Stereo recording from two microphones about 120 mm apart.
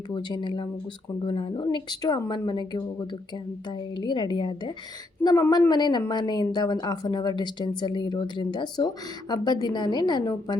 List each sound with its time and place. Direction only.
0.1 s speech: 40° left (ahead or behind)
1.6 s speech: 35° left (ahead or behind)
5.2 s speech: 30° left (ahead or behind)